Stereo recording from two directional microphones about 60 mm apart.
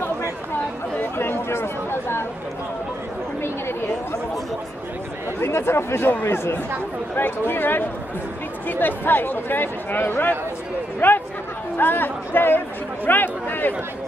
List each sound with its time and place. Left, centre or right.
1.1 s chatter: left
5.4 s speech: left